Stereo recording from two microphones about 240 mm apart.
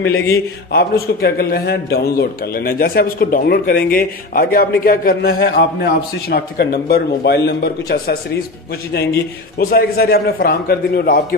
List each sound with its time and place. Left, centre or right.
0.7 s a man's voice: left
9.6 s a man's voice: left